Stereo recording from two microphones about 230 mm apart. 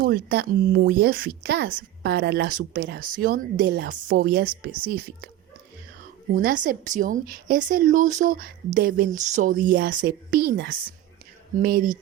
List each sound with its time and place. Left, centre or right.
0.0 s speech: right
6.3 s speech: right